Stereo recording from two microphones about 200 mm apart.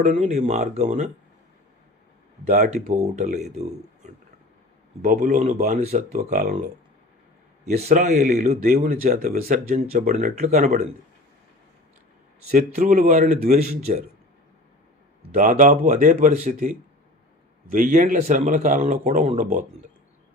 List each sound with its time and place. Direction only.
0.0 s a man's voice: 35° right (ahead or behind)
2.4 s a man's voice: 35° right (ahead or behind)
5.0 s a man's voice: 40° right (ahead or behind)
7.8 s a man's voice: 35° right (ahead or behind)
12.5 s a man's voice: 35° right (ahead or behind)
15.4 s a man's voice: 40° right (ahead or behind)